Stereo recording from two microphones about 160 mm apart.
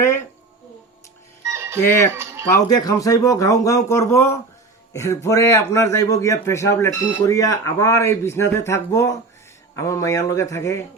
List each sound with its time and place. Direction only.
0.0 s a sound: 15° left (ahead or behind)
1.5 s music: 15° right (ahead or behind)
1.8 s a man's voice: 15° left (ahead or behind)